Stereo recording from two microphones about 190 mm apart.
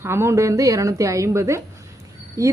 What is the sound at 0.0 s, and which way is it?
A woman's voice, 15° right (ahead or behind).